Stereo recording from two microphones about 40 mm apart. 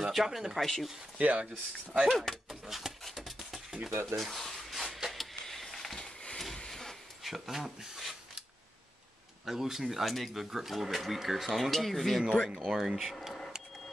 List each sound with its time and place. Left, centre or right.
0.0 s speech: centre
0.6 s speech: centre
1.1 s speech: right
2.0 s speech: centre
2.6 s a sound: centre
5.3 s a sound: centre
5.9 s a sound: centre
7.2 s speech: centre
9.5 s speech: centre
10.0 s speech: centre
12.3 s speech: centre